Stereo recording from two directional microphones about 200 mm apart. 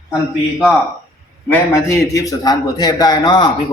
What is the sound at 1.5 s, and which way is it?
A man's voice, 15° left (ahead or behind).